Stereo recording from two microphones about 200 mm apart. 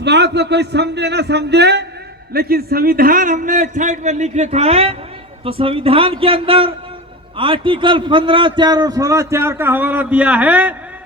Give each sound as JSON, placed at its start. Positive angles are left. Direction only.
{"t": 0.0, "sound": "a man's voice", "side_deg": -55}